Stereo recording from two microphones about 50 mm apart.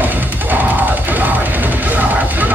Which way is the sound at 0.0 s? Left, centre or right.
Right.